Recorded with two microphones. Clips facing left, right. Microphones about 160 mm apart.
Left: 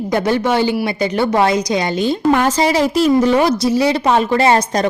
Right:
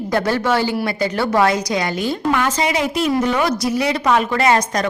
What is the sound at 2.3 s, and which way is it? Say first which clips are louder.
A woman's voice: left 5 dB; 35° left (ahead or behind).